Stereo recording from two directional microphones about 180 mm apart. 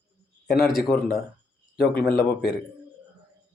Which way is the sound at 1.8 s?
60° left (ahead or behind).